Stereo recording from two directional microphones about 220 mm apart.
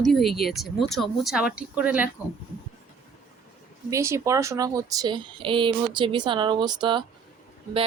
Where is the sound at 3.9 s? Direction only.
15° right (ahead or behind).